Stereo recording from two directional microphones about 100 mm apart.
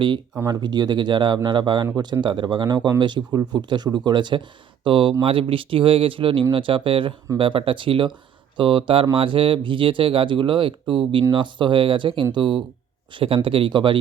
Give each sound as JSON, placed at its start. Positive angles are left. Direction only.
{"t": 0.4, "sound": "speech", "side_deg": -45}